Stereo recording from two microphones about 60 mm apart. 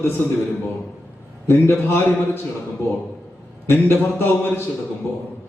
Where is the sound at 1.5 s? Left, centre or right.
Left.